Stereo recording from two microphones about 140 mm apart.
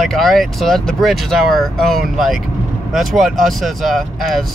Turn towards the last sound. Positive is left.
turn(degrees=0)  # may be behind; listen again after turning